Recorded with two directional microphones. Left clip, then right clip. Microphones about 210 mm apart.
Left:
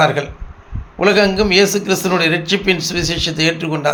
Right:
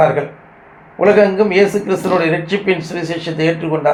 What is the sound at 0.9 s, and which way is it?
A man's voice, 65° left (ahead or behind).